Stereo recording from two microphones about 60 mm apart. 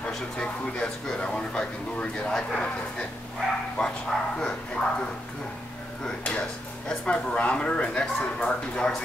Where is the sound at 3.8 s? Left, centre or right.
Centre.